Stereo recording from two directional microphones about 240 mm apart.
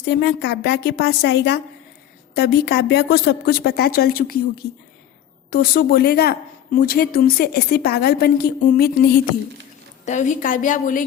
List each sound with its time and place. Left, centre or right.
0.0 s a woman's voice: left
10.1 s a woman's voice: left